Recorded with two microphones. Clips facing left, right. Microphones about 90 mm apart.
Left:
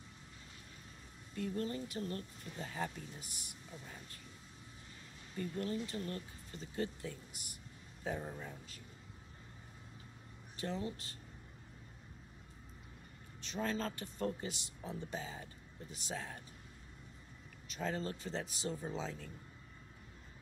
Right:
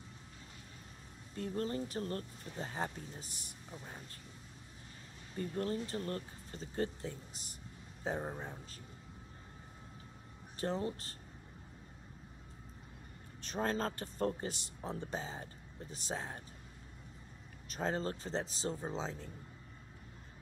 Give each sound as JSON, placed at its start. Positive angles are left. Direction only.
{"t": 1.3, "sound": "speech", "side_deg": -35}
{"t": 5.4, "sound": "speech", "side_deg": -40}
{"t": 10.6, "sound": "speech", "side_deg": -40}
{"t": 13.4, "sound": "speech", "side_deg": -40}
{"t": 17.6, "sound": "speech", "side_deg": -40}